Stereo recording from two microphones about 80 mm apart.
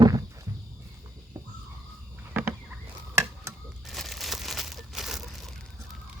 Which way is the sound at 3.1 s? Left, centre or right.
Right.